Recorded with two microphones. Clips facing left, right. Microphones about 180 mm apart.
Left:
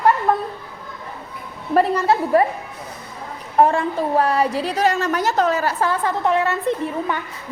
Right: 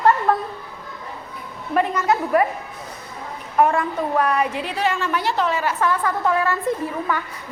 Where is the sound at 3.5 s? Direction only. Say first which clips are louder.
Left 2 dB; 30° left (ahead or behind).